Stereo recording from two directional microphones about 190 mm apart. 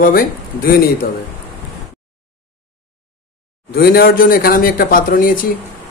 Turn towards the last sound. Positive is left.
turn(degrees=45)  # may be behind; listen again after turning